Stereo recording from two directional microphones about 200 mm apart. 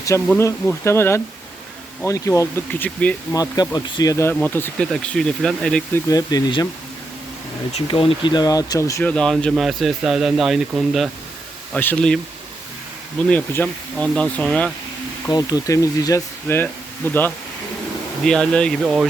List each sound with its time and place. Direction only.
0.3 s speech: 10° left (ahead or behind)
3.3 s speech: 20° left (ahead or behind)
6.1 s speech: 20° left (ahead or behind)
7.7 s speech: 30° left (ahead or behind); by 14.7 s 5° left (ahead or behind)
15.3 s speech: 20° left (ahead or behind)
18.3 s speech: 5° left (ahead or behind)